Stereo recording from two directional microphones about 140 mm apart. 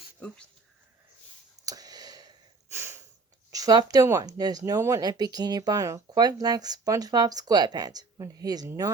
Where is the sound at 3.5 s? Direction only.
25° right (ahead or behind).